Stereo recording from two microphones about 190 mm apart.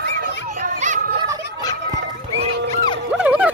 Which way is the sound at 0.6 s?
40° right (ahead or behind).